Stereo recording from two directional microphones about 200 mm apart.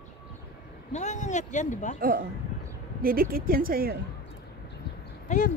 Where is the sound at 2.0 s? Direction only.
45° right (ahead or behind).